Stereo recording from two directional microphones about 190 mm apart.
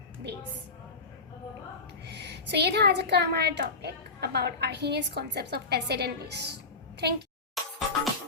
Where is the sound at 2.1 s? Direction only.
60° right (ahead or behind).